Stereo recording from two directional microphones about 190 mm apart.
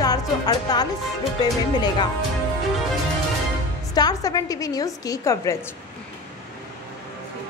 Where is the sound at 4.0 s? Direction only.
20° left (ahead or behind).